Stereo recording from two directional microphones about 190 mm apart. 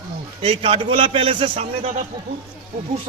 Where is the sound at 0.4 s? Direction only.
30° right (ahead or behind).